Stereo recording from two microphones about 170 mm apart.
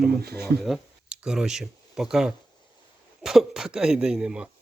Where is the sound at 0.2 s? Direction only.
65° right (ahead or behind).